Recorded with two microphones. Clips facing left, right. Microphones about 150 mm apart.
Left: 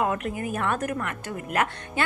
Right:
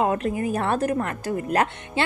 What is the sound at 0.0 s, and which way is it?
A woman's voice, 30° right (ahead or behind).